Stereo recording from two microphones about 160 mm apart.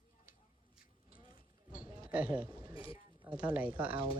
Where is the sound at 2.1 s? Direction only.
10° right (ahead or behind).